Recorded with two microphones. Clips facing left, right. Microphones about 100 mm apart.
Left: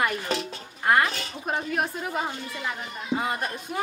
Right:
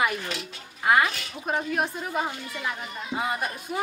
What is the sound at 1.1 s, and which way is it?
Speech, 35° left (ahead or behind).